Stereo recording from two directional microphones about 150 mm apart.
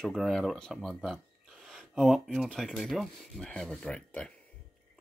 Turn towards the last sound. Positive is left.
turn(degrees=10)  # may be behind; listen again after turning